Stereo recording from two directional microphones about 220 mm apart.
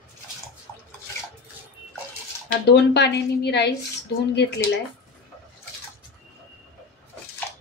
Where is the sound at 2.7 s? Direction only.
50° left (ahead or behind).